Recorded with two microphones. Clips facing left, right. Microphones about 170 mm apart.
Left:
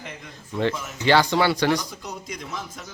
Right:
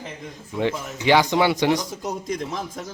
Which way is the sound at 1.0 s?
15° right (ahead or behind).